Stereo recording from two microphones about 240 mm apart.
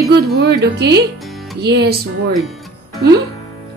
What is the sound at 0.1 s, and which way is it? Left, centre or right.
A woman's voice, right.